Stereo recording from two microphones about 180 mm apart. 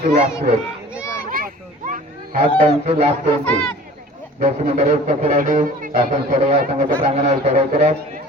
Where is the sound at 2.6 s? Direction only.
35° right (ahead or behind).